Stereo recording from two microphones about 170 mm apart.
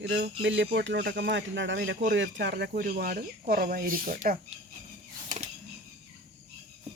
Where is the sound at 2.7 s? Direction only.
60° right (ahead or behind).